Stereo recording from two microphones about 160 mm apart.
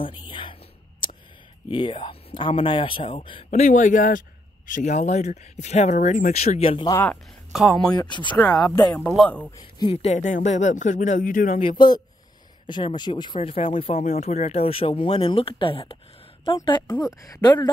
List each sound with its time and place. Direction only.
0.3 s a sound: 30° left (ahead or behind)
1.7 s speech: 30° left (ahead or behind)
3.4 s speech: 50° left (ahead or behind)
6.9 s speech: 10° left (ahead or behind)
7.5 s a man's voice: centre (ahead or behind)
7.9 s a woman's voice: 25° left (ahead or behind)
9.1 s a man's voice: 5° left (ahead or behind)
9.8 s speech: 35° left (ahead or behind); by 11.6 s 55° left (ahead or behind)
11.6 s a woman's voice: 25° left (ahead or behind)